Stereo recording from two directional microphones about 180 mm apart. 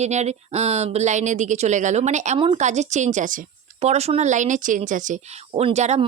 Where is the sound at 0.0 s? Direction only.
40° right (ahead or behind).